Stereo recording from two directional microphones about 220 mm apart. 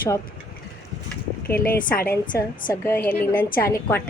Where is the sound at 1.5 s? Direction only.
40° left (ahead or behind).